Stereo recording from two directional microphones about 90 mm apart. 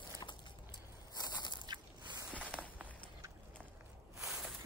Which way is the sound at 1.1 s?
55° left (ahead or behind).